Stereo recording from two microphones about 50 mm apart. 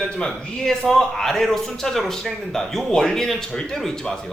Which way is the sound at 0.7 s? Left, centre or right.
Centre.